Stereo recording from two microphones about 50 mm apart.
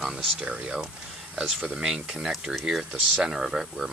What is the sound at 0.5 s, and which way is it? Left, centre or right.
Speech, right.